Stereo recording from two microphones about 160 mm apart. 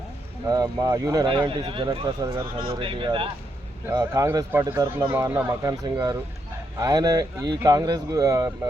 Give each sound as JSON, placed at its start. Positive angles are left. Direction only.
{"t": 0.4, "sound": "speech", "side_deg": -25}
{"t": 3.9, "sound": "speech", "side_deg": -20}